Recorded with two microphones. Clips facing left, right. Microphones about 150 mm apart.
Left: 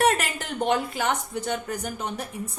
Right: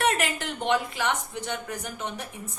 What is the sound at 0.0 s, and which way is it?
A woman's voice, 40° left (ahead or behind).